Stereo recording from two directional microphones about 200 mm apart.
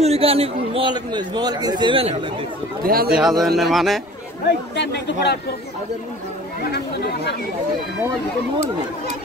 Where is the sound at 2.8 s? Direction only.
50° right (ahead or behind).